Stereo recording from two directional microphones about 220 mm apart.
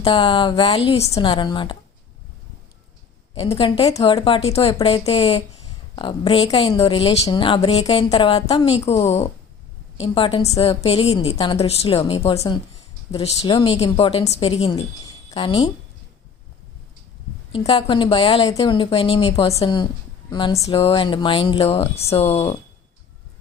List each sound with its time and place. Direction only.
0.0 s a woman's voice: 20° left (ahead or behind)
3.3 s a woman's voice: 25° left (ahead or behind)
17.5 s a woman's voice: 20° left (ahead or behind)